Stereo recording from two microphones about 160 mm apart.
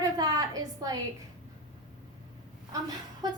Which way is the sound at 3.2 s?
25° right (ahead or behind).